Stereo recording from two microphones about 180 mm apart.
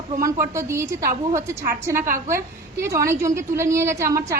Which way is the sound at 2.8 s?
15° right (ahead or behind).